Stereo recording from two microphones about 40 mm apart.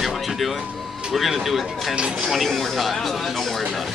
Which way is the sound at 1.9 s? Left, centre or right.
Right.